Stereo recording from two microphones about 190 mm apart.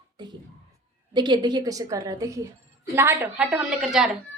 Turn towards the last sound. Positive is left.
turn(degrees=0)  # may be behind; listen again after turning